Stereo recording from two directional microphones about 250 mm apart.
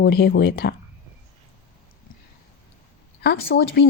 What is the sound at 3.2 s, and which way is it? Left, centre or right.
Speech, left.